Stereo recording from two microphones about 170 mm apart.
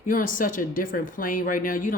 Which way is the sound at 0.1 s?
55° left (ahead or behind).